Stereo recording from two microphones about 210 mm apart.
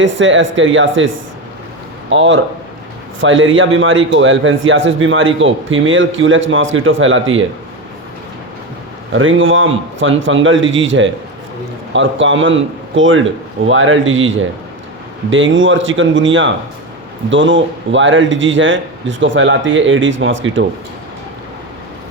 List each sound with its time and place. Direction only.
0.0 s a man's voice: 65° right (ahead or behind)
9.1 s a man's voice: 70° right (ahead or behind)